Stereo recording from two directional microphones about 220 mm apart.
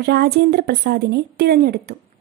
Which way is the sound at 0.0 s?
45° right (ahead or behind).